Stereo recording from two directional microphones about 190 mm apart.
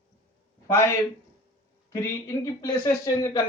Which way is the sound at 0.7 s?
15° left (ahead or behind).